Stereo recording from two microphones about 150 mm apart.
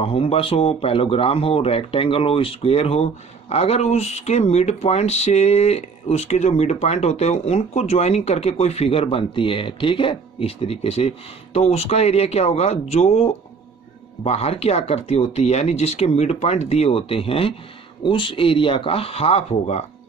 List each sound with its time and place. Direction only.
0.0 s speech: 40° left (ahead or behind)